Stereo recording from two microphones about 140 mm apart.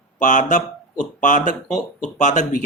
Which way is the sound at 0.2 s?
60° left (ahead or behind).